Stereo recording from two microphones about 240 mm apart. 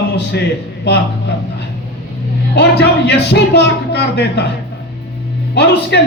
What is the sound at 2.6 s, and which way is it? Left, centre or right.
A man's voice, left.